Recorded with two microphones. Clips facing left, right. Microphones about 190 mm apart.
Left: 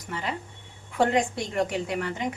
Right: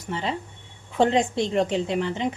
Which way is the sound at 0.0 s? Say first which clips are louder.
Right 4 dB; 25° right (ahead or behind).